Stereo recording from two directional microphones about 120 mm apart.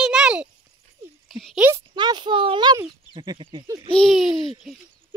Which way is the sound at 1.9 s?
40° right (ahead or behind).